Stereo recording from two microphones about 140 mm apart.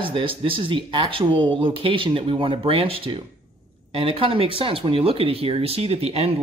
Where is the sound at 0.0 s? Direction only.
40° right (ahead or behind).